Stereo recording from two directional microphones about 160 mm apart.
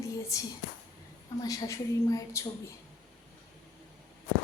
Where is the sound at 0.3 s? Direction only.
20° left (ahead or behind).